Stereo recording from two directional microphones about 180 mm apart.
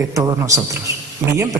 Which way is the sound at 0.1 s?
20° right (ahead or behind).